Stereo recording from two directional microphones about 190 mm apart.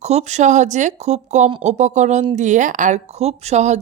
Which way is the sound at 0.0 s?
35° right (ahead or behind).